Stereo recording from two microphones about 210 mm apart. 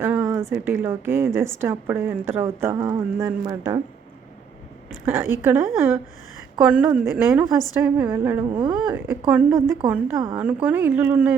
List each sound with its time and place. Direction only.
0.0 s a sound: 10° right (ahead or behind)
0.5 s a woman's voice: 10° right (ahead or behind)
5.0 s a woman's voice: 10° right (ahead or behind)
8.4 s speech: 20° right (ahead or behind)
8.9 s a woman's voice: 10° right (ahead or behind)
10.3 s a woman's voice: 5° right (ahead or behind)